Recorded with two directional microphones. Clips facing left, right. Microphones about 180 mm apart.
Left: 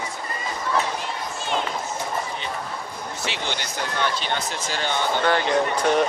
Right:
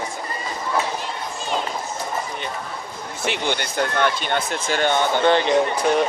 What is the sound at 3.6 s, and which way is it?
Speech, 55° right (ahead or behind).